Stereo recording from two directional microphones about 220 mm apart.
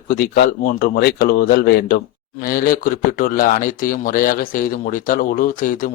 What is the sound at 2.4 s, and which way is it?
Speech, 40° left (ahead or behind).